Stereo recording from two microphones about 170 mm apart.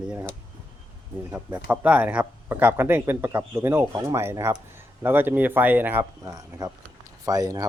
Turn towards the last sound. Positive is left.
turn(degrees=-20)  # may be behind; listen again after turning